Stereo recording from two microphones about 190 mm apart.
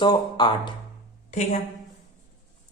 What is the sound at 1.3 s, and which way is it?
Speech, 35° left (ahead or behind).